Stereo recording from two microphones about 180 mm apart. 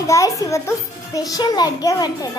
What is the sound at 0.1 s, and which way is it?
A child's voice, 15° left (ahead or behind).